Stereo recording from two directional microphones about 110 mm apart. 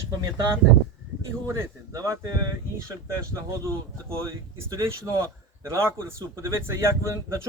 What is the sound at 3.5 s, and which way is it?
Speech, 25° right (ahead or behind).